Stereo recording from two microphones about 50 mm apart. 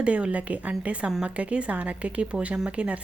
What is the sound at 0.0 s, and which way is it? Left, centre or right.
A woman's voice, right.